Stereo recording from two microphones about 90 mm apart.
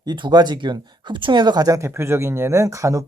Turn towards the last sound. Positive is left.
turn(degrees=-35)  # may be behind; listen again after turning